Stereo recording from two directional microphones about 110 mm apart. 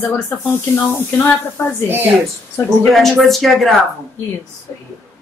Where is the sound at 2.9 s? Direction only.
Centre (ahead or behind).